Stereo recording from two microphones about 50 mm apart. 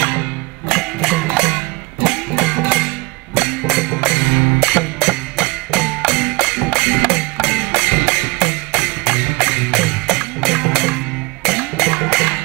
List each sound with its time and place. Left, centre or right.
0.0 s music: left
0.7 s music: centre
1.3 s music: centre
2.0 s music: centre
4.6 s music: centre